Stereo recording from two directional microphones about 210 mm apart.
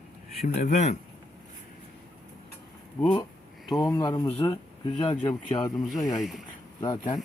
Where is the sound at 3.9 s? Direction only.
20° left (ahead or behind).